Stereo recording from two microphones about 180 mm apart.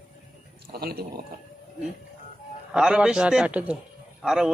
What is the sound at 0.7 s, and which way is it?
Speech, 60° right (ahead or behind).